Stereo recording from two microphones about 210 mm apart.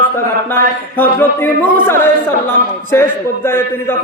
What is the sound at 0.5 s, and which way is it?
A man's voice, 10° left (ahead or behind).